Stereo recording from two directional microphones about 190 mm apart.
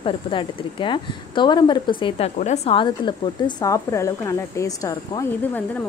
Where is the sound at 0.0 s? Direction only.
25° left (ahead or behind).